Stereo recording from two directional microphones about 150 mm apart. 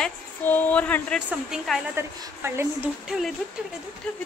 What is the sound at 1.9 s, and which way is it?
Speech, 15° right (ahead or behind).